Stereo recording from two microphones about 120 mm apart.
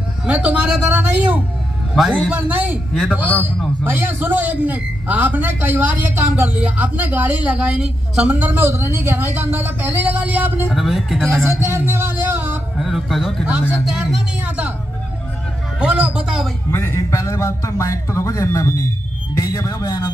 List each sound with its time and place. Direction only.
0.3 s a man's voice: 10° right (ahead or behind)
2.9 s speech: centre (ahead or behind)
3.2 s a man's voice: 15° right (ahead or behind)
10.7 s speech: centre (ahead or behind)
11.2 s a man's voice: 20° right (ahead or behind)
12.7 s a man's voice: centre (ahead or behind)
15.8 s a man's voice: 10° right (ahead or behind)
16.7 s a man's voice: 20° left (ahead or behind)